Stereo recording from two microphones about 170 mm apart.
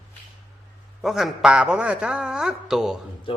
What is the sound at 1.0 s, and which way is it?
A man's voice, centre (ahead or behind).